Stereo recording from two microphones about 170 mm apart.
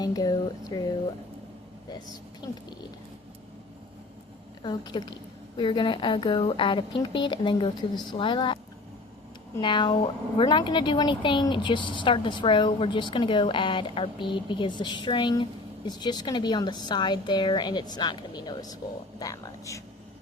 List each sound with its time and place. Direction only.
0.0 s speech: 25° left (ahead or behind)
4.6 s speech: 25° left (ahead or behind)
9.6 s speech: 30° left (ahead or behind)